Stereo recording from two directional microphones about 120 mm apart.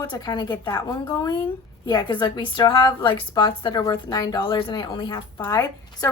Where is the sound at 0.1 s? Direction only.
35° left (ahead or behind).